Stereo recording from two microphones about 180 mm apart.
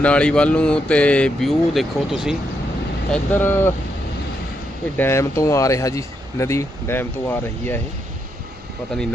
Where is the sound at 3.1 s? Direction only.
10° left (ahead or behind).